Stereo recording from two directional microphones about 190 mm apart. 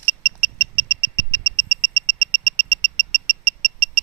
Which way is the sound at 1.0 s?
60° left (ahead or behind).